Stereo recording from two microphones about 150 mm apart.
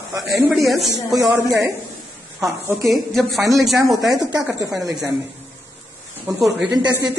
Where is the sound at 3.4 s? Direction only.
20° right (ahead or behind).